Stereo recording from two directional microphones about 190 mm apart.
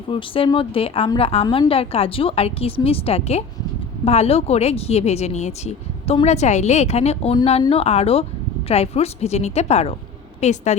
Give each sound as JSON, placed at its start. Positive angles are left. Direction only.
{"t": 0.1, "sound": "a woman's voice", "side_deg": 25}